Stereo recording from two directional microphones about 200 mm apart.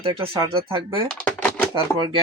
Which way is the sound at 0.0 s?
30° right (ahead or behind).